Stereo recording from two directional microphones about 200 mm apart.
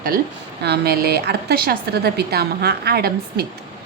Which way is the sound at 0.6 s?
55° right (ahead or behind).